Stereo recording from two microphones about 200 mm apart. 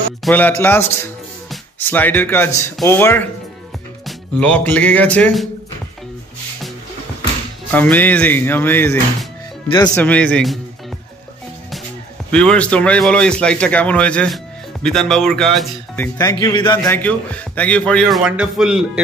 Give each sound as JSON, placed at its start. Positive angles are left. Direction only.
{"t": 0.2, "sound": "speech", "side_deg": 10}
{"t": 7.7, "sound": "speech", "side_deg": 10}
{"t": 12.3, "sound": "a man's voice", "side_deg": 5}
{"t": 16.2, "sound": "speech", "side_deg": 20}
{"t": 16.9, "sound": "a man's voice", "side_deg": 5}